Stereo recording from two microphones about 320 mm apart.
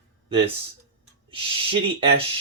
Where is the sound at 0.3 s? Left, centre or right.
Centre.